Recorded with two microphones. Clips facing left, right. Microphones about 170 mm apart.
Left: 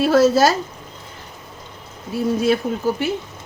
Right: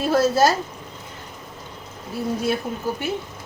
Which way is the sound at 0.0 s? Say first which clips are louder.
Left 4 dB; 80° left.